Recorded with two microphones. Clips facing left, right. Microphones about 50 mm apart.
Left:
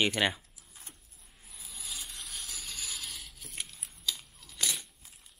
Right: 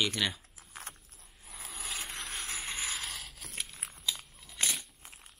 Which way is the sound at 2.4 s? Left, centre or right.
Right.